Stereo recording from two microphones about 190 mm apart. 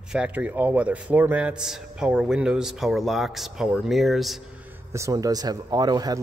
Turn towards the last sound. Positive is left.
turn(degrees=-20)  # may be behind; listen again after turning